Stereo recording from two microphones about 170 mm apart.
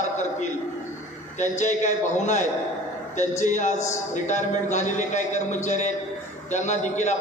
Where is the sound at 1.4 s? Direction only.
45° left (ahead or behind).